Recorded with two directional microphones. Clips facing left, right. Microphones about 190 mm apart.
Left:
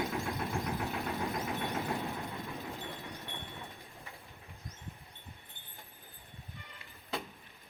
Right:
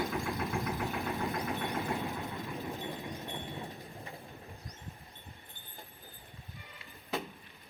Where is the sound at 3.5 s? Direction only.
35° right (ahead or behind).